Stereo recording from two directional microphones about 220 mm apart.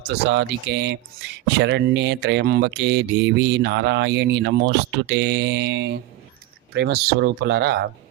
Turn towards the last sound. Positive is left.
turn(degrees=-50)  # may be behind; listen again after turning